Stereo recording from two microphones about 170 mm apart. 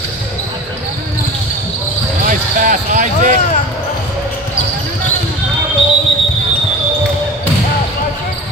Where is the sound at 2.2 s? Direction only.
50° right (ahead or behind).